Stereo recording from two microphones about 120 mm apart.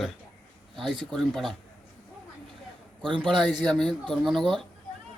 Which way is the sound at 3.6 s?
5° left (ahead or behind).